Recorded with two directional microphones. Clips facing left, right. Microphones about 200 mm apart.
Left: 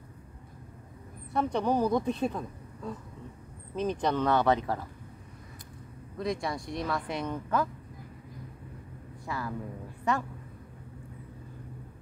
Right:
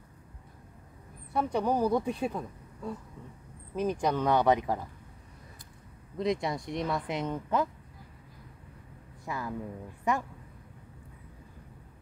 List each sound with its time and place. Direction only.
1.3 s a woman's voice: 10° right (ahead or behind)
6.1 s speech: 20° right (ahead or behind)
9.2 s a woman's voice: 15° right (ahead or behind)